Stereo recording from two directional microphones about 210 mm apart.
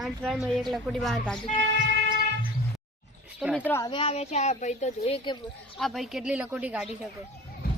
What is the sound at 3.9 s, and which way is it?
A woman's voice, 25° left (ahead or behind).